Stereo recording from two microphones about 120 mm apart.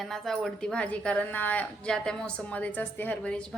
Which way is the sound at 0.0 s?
Centre (ahead or behind).